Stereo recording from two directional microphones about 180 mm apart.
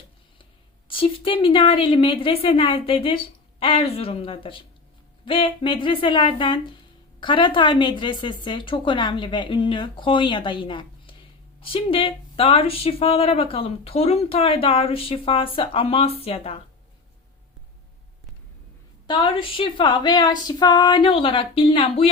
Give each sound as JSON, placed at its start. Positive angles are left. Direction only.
{"t": 0.9, "sound": "a woman's voice", "side_deg": 30}
{"t": 19.0, "sound": "a woman's voice", "side_deg": 30}